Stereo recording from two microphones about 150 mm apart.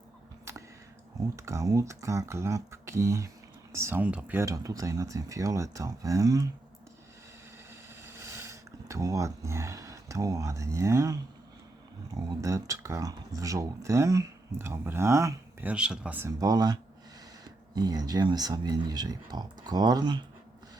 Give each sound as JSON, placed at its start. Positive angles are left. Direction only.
{"t": 1.4, "sound": "speech", "side_deg": -20}
{"t": 7.7, "sound": "a sound", "side_deg": -20}
{"t": 12.4, "sound": "speech", "side_deg": -20}
{"t": 15.7, "sound": "speech", "side_deg": -5}
{"t": 16.4, "sound": "speech", "side_deg": -25}